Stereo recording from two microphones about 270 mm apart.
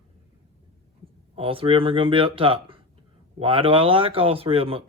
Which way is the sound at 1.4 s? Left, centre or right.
Centre.